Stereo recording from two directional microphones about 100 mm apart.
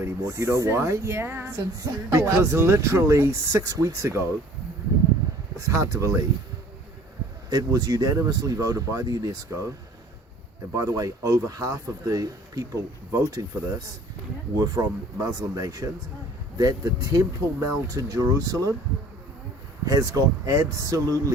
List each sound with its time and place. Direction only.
0.0 s speech: 30° right (ahead or behind)
5.5 s speech: 30° right (ahead or behind)
7.5 s speech: 40° right (ahead or behind)
10.8 s speech: 35° right (ahead or behind)
19.8 s speech: 35° right (ahead or behind)